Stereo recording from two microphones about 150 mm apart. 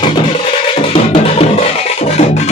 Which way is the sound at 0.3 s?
40° left (ahead or behind).